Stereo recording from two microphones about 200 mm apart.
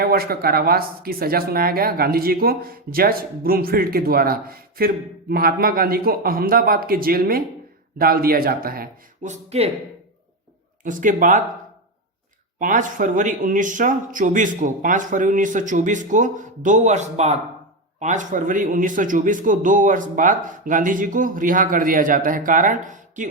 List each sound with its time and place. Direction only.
0.0 s speech: 50° right (ahead or behind); by 9.7 s 30° right (ahead or behind)
10.8 s speech: 40° right (ahead or behind)
12.5 s speech: 40° right (ahead or behind)